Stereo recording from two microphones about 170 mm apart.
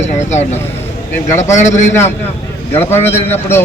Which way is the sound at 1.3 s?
15° left (ahead or behind).